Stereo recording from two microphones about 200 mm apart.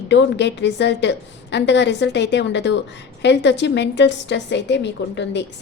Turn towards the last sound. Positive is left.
turn(degrees=60)  # may be behind; listen again after turning